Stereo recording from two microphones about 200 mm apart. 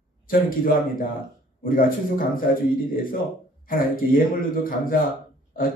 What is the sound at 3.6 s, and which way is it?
A man's voice, 45° left (ahead or behind).